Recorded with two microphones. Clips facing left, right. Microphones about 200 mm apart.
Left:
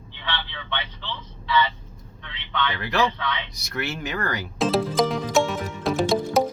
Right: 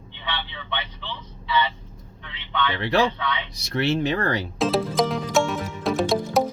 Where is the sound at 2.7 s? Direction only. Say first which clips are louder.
Right 4 dB; 30° right (ahead or behind).